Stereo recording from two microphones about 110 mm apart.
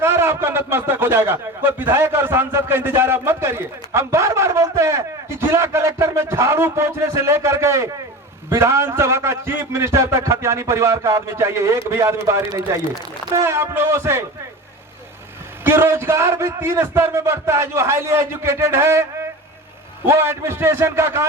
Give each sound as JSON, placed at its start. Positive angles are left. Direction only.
{"t": 0.0, "sound": "a man's voice", "side_deg": -20}
{"t": 15.6, "sound": "a man's voice", "side_deg": -25}
{"t": 20.1, "sound": "a man's voice", "side_deg": -25}